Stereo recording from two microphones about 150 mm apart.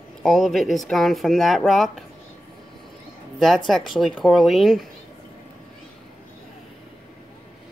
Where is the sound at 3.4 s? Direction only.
Centre (ahead or behind).